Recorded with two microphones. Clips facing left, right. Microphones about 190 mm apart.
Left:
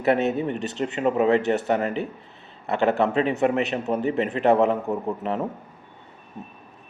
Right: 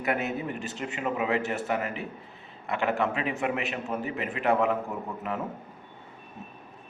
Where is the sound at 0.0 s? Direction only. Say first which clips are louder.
Left 8 dB; 30° left (ahead or behind).